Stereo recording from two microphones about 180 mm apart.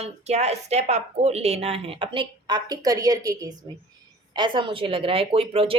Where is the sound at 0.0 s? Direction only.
40° right (ahead or behind).